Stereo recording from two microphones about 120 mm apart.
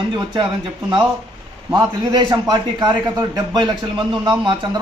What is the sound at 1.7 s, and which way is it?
A man's voice, 35° right (ahead or behind).